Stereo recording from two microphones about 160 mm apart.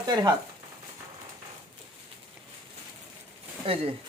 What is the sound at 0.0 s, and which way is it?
Speech, 25° right (ahead or behind).